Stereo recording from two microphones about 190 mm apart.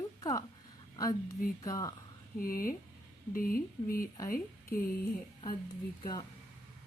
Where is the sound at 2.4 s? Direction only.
50° left (ahead or behind).